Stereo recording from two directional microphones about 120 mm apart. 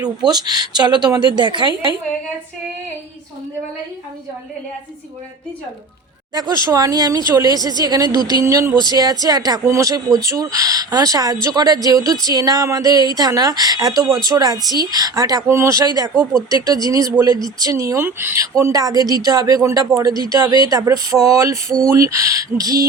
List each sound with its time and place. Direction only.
0.3 s a woman's voice: 35° right (ahead or behind)
6.3 s a woman's voice: 30° right (ahead or behind)